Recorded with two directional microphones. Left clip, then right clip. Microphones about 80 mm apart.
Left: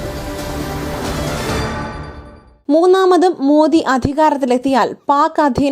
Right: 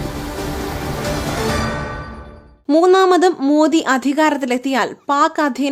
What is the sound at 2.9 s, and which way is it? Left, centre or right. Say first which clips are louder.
Speech: even; centre.